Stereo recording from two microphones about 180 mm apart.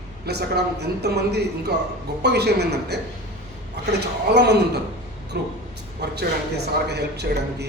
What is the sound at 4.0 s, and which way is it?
A woman's voice, 65° right (ahead or behind).